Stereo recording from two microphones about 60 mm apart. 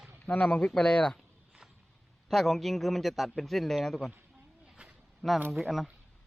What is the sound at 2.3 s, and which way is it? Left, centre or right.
A man's voice, centre.